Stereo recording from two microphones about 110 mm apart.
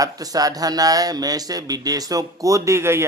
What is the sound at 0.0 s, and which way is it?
Speech, 35° right (ahead or behind).